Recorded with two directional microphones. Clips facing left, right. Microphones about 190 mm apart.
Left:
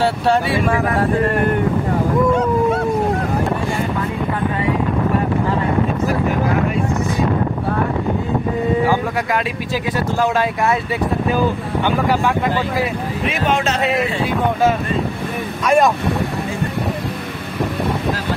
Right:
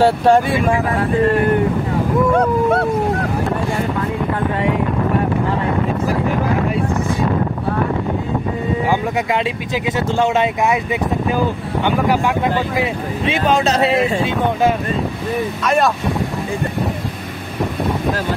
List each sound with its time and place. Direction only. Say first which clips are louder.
0.0 s speech: right 4 dB; 50° right (ahead or behind)
9.9 s speech: right 2 dB; 20° right (ahead or behind)
13.3 s speech: right 4 dB; 35° right (ahead or behind)
15.6 s speech: left 3 dB; 10° left (ahead or behind)